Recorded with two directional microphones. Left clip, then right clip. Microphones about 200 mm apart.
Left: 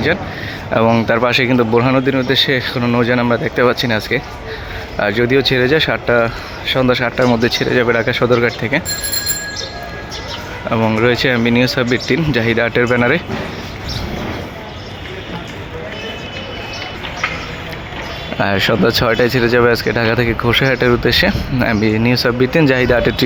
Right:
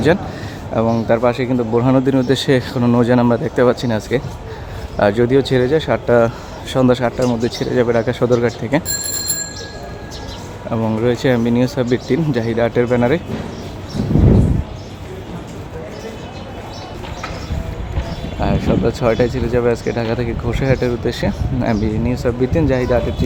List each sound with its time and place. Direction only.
0.7 s speech: 5° right (ahead or behind)
1.8 s speech: 15° right (ahead or behind)
7.2 s speech: centre (ahead or behind)
10.7 s speech: 5° right (ahead or behind)
18.4 s speech: centre (ahead or behind)